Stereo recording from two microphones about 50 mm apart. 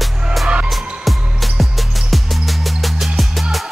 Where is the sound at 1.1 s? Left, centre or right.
Centre.